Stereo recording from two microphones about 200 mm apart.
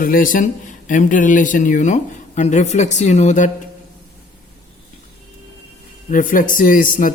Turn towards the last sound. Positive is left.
turn(degrees=45)  # may be behind; listen again after turning